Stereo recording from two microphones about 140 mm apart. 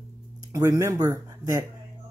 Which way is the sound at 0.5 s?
20° right (ahead or behind).